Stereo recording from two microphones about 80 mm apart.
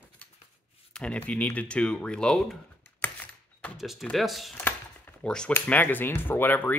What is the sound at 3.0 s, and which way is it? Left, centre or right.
Typewriter, left.